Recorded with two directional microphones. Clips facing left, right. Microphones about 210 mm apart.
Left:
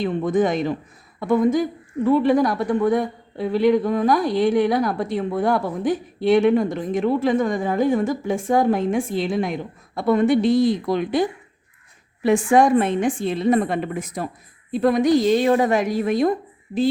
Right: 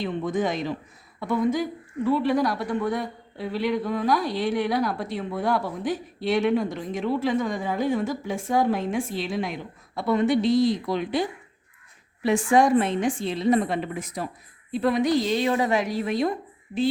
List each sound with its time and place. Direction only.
0.0 s speech: 50° left (ahead or behind)